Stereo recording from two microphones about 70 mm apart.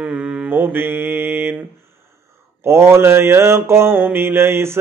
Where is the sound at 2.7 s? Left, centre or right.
Right.